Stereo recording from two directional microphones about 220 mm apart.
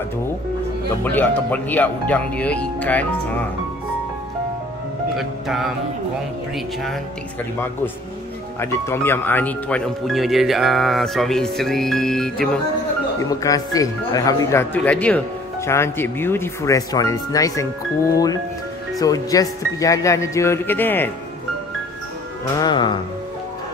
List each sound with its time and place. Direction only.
1.0 s speech: 10° left (ahead or behind)
5.1 s speech: centre (ahead or behind)
8.5 s speech: 10° left (ahead or behind)
13.2 s speech: 15° left (ahead or behind)
22.6 s speech: 20° left (ahead or behind)